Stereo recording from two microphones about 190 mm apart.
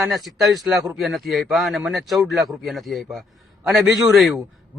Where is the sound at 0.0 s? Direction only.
Centre (ahead or behind).